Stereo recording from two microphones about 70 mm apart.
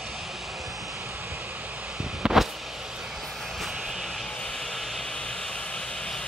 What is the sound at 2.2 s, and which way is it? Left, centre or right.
Vehicle, centre.